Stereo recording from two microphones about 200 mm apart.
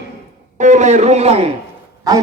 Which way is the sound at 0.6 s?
35° right (ahead or behind).